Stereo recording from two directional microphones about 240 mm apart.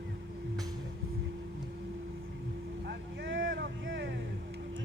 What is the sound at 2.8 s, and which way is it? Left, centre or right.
Vehicle, right.